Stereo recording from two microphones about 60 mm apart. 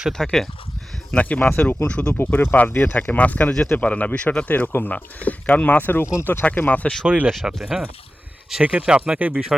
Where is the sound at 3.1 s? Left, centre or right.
Left.